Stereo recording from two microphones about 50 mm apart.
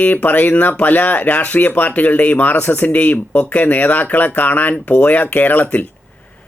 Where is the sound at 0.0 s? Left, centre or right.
Left.